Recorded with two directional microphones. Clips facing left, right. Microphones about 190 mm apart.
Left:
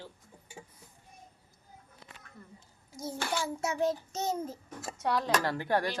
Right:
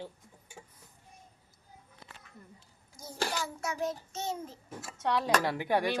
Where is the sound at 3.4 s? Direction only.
25° left (ahead or behind); by 4.9 s 40° left (ahead or behind).